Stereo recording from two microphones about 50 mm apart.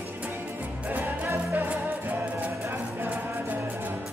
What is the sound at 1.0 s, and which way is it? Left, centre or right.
Music, right.